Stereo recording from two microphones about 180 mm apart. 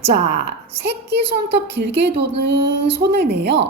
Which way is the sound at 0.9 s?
70° right (ahead or behind).